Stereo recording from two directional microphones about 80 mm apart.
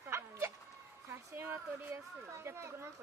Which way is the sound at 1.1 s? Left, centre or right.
Right.